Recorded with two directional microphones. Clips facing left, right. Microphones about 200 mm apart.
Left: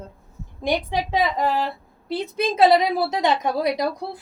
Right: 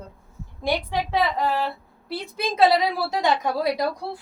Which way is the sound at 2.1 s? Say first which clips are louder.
Left 5 dB; 20° left (ahead or behind).